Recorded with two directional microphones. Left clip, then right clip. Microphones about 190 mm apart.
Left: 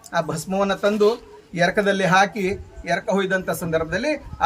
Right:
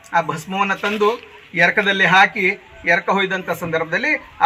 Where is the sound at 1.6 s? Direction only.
35° left (ahead or behind).